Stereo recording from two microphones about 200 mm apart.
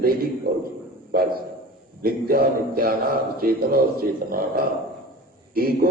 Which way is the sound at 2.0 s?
45° right (ahead or behind).